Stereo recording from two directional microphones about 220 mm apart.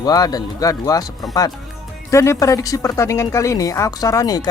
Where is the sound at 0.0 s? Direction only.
15° left (ahead or behind).